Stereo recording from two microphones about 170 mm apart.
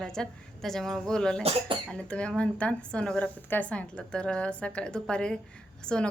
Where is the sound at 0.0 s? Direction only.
5° left (ahead or behind).